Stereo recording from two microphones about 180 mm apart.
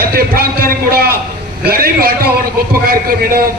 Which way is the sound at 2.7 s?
55° right (ahead or behind).